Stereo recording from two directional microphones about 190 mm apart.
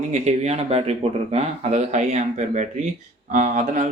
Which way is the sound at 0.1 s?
35° right (ahead or behind).